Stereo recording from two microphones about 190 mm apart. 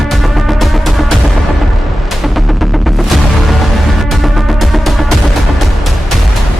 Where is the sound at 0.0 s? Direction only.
Centre (ahead or behind).